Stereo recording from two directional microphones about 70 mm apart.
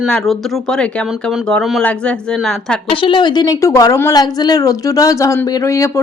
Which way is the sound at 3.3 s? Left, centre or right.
Left.